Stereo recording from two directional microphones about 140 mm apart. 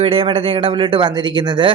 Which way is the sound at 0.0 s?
40° right (ahead or behind).